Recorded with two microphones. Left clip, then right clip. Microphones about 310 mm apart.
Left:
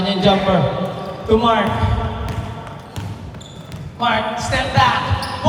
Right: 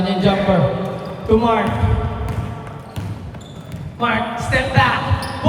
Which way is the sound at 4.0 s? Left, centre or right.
Centre.